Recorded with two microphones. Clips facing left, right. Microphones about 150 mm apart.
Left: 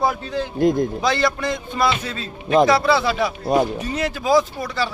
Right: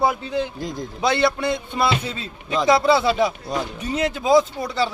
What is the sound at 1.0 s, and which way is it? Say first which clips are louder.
Speech: right 1 dB; 25° right (ahead or behind).